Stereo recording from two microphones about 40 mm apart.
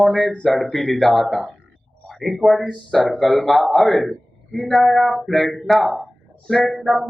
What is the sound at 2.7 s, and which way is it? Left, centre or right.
Speech, centre.